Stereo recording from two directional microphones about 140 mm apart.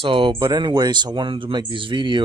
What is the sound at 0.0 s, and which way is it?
Speech, 40° right (ahead or behind).